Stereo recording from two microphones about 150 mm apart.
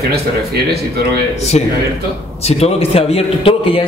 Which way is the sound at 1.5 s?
45° left (ahead or behind).